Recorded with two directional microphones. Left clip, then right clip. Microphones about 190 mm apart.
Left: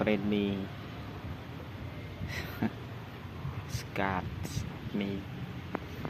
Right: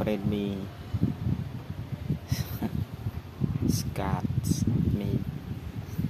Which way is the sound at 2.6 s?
15° right (ahead or behind).